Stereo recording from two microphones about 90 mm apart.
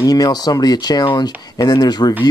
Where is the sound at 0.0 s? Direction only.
45° left (ahead or behind).